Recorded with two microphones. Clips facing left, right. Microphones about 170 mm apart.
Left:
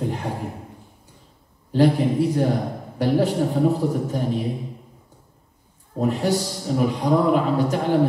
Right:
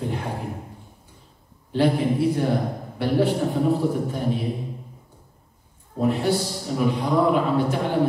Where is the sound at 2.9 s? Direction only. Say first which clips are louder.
Left 2 dB; 40° left (ahead or behind).